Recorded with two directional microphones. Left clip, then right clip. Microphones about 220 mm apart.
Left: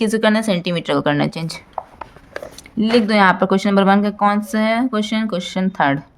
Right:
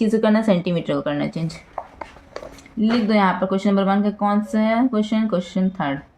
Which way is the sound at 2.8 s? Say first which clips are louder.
Left 5 dB; 45° left (ahead or behind).